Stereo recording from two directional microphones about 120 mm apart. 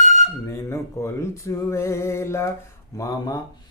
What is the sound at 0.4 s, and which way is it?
Mantra, 25° left (ahead or behind).